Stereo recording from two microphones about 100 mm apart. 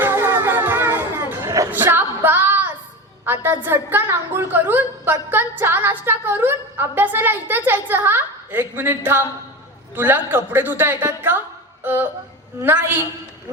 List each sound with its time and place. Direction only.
0.0 s music: 20° right (ahead or behind)
1.7 s a sound: 20° right (ahead or behind)
3.2 s a woman's voice: 20° right (ahead or behind)
12.5 s a woman's voice: 20° right (ahead or behind)